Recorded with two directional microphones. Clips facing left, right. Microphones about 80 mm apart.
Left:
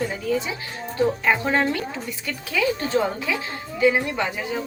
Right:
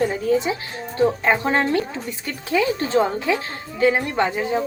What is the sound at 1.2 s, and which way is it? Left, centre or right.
Speech, right.